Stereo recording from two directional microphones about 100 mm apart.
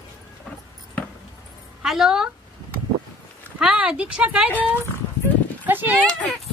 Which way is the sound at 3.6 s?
10° right (ahead or behind).